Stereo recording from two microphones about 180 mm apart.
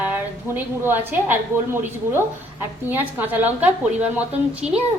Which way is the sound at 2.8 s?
10° right (ahead or behind).